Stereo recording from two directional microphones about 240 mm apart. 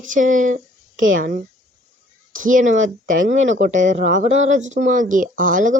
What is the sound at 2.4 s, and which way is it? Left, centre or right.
Speech, right.